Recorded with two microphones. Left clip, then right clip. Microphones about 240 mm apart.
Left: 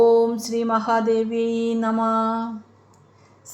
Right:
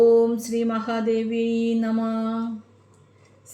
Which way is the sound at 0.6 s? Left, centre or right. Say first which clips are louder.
Left 9 dB; left.